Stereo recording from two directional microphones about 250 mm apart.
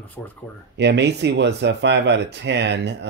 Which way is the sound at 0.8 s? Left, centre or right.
Right.